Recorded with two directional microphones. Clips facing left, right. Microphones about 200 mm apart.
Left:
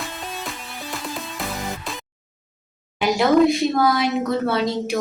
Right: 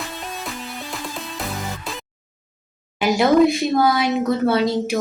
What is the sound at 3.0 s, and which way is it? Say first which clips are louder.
Speech: right 1 dB; centre (ahead or behind).